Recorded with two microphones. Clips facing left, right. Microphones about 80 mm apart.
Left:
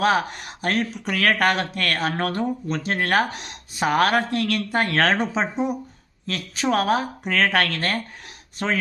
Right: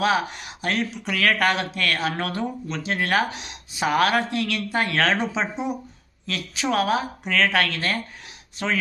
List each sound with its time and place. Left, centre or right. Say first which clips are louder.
0.0 s a woman's voice: left 2 dB; left